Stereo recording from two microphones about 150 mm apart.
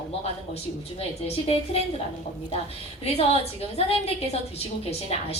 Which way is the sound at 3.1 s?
45° left (ahead or behind).